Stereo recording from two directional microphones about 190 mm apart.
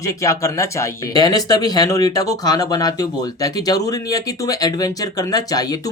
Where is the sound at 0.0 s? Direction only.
15° left (ahead or behind).